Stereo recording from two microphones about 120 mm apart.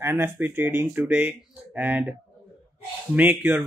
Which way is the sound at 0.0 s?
20° right (ahead or behind).